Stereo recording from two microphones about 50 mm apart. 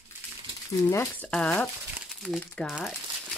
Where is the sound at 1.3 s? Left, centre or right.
Centre.